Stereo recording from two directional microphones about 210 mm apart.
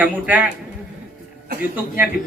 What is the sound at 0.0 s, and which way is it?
Speech, 5° right (ahead or behind).